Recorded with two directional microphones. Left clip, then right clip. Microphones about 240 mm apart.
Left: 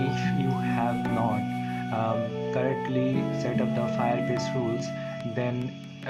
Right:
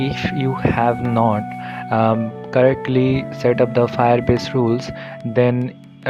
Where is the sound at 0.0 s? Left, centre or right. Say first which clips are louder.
Right 7 dB; right.